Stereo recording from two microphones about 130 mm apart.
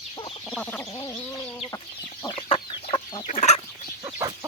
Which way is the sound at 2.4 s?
45° left (ahead or behind).